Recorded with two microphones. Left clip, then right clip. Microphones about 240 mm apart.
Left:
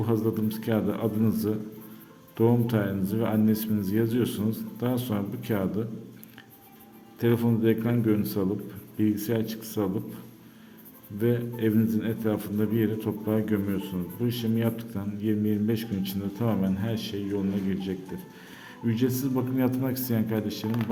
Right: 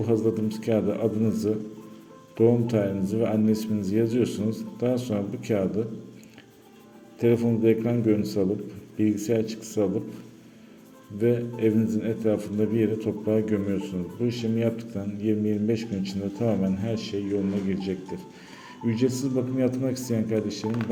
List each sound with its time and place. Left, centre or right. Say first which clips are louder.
0.0 s a man's voice: right 3 dB; centre
7.2 s a man's voice: right 3 dB; centre
11.2 s a man's voice: right 3 dB; centre